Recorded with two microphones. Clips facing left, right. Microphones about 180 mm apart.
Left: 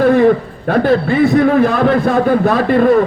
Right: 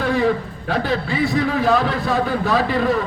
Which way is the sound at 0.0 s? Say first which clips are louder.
Left 9 dB; 55° left (ahead or behind).